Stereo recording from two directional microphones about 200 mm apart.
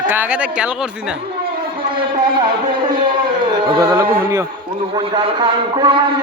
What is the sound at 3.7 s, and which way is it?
A man's voice, 20° right (ahead or behind).